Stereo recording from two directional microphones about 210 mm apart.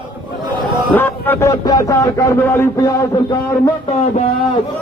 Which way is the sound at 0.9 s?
10° left (ahead or behind).